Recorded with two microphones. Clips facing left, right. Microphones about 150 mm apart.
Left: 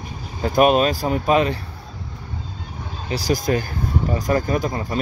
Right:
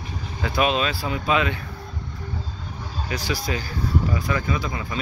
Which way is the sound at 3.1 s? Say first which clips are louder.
Left 7 dB; 40° left (ahead or behind).